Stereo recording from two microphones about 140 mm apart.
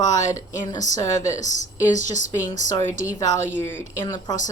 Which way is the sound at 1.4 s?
60° left (ahead or behind).